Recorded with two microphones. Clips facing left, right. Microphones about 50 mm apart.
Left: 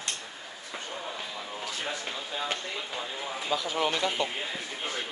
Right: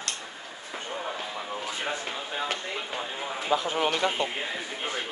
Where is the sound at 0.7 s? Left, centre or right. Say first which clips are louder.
Right 4 dB; right.